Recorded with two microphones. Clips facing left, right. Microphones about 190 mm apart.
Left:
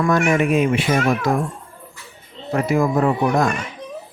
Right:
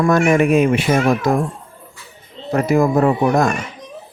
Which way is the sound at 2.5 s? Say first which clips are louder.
Right 3 dB; 45° right (ahead or behind).